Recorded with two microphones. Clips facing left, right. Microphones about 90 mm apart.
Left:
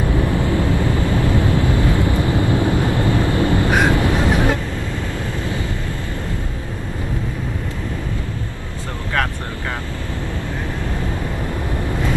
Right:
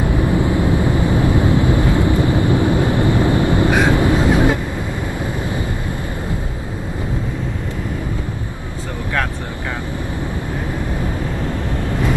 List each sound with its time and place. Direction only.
0.3 s vehicle: 20° right (ahead or behind)